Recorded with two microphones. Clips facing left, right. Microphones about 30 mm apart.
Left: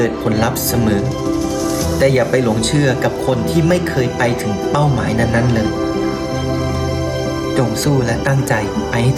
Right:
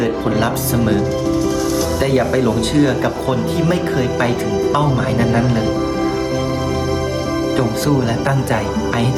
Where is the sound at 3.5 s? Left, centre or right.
Left.